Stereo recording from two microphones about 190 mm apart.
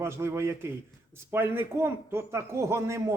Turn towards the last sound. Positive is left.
turn(degrees=-15)  # may be behind; listen again after turning